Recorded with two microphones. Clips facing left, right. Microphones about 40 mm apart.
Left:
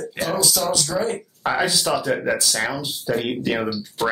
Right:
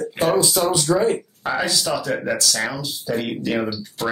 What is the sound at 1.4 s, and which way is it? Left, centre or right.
Speech, centre.